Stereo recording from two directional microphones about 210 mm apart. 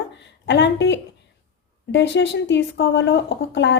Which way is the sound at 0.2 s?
55° left (ahead or behind).